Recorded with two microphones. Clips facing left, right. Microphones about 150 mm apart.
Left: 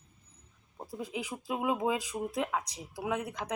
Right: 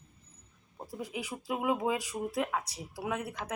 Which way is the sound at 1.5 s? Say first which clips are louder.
Even; 10° left (ahead or behind).